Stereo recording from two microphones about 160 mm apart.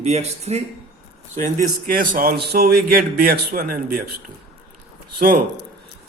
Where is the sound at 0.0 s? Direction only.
40° right (ahead or behind).